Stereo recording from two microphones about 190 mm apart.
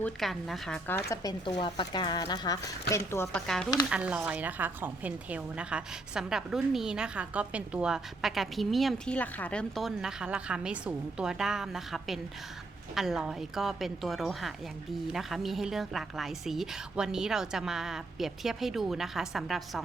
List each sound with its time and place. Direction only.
0.0 s a woman's voice: centre (ahead or behind)
1.1 s a woman's voice: 20° left (ahead or behind); by 19.8 s centre (ahead or behind)